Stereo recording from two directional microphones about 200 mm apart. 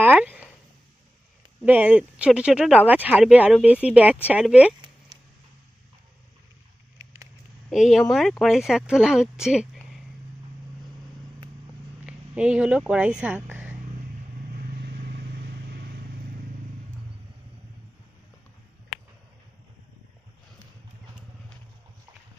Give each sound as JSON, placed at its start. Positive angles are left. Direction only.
{"t": 0.0, "sound": "a sound", "side_deg": -10}
{"t": 1.6, "sound": "speech", "side_deg": -10}
{"t": 7.0, "sound": "a sound", "side_deg": -15}
{"t": 7.7, "sound": "speech", "side_deg": 0}
{"t": 12.0, "sound": "speech", "side_deg": -5}
{"t": 14.5, "sound": "vehicle", "side_deg": -50}